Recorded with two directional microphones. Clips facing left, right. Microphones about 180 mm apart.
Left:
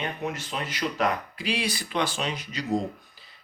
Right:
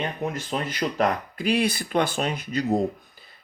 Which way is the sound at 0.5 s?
45° right (ahead or behind).